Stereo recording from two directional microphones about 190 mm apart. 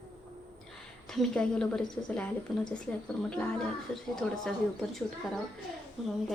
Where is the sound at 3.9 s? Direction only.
Centre (ahead or behind).